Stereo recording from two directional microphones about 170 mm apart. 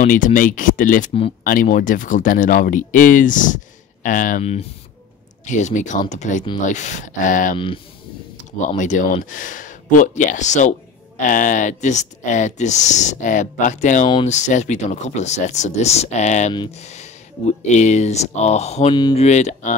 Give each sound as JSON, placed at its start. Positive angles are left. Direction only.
{"t": 0.0, "sound": "speech", "side_deg": 50}
{"t": 7.5, "sound": "speech", "side_deg": 30}
{"t": 8.5, "sound": "speech", "side_deg": 45}
{"t": 16.8, "sound": "a sound", "side_deg": 40}
{"t": 17.6, "sound": "speech", "side_deg": 45}
{"t": 18.9, "sound": "speech", "side_deg": 25}
{"t": 19.2, "sound": "speech", "side_deg": 40}